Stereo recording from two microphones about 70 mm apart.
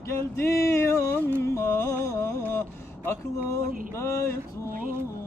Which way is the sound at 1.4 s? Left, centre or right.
Left.